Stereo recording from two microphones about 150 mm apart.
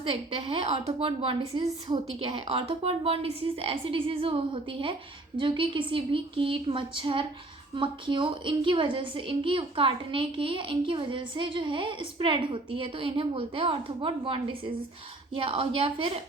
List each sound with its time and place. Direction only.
0.0 s a woman's voice: 35° right (ahead or behind)